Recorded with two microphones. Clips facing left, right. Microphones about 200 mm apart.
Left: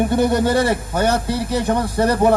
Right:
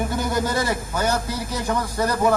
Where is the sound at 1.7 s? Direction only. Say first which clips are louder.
Left 4 dB; 30° left (ahead or behind).